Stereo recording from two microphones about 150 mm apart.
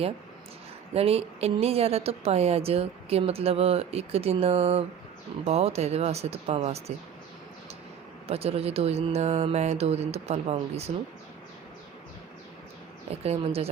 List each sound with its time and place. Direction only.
0.9 s a woman's voice: 40° right (ahead or behind)
8.3 s speech: 45° right (ahead or behind)
13.2 s speech: 40° right (ahead or behind)